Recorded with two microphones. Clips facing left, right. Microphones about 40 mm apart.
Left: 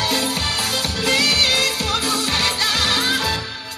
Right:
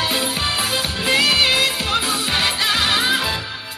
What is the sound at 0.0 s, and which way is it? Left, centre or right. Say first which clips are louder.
Music: even; right.